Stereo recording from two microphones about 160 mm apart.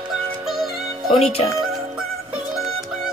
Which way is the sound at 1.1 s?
40° left (ahead or behind).